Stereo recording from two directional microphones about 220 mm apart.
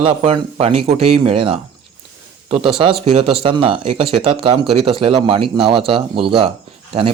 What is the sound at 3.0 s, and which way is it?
Speech, 30° right (ahead or behind).